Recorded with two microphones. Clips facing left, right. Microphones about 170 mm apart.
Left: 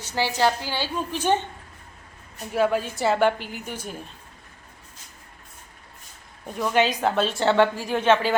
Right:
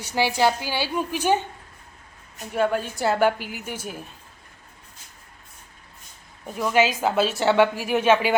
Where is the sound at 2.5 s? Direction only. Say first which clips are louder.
Left 1 dB; centre (ahead or behind).